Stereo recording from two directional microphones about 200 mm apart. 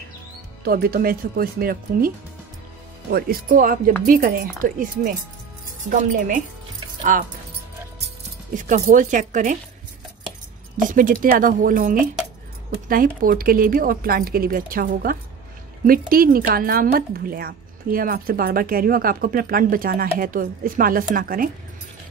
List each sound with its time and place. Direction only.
0.7 s a woman's voice: 50° right (ahead or behind)
8.6 s speech: 40° right (ahead or behind)
10.9 s a woman's voice: 40° right (ahead or behind)